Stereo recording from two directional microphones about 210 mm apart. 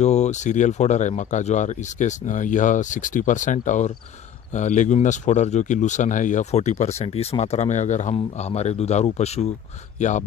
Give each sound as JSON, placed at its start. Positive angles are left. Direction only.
{"t": 0.0, "sound": "speech", "side_deg": 35}